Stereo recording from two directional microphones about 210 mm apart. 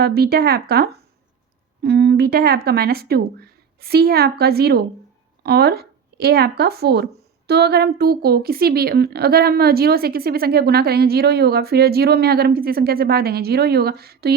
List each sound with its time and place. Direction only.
0.0 s speech: 50° right (ahead or behind)